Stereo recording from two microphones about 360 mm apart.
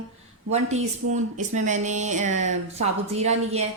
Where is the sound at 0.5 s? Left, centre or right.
Centre.